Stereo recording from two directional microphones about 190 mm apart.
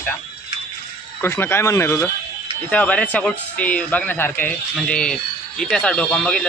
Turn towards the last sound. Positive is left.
turn(degrees=5)  # may be behind; listen again after turning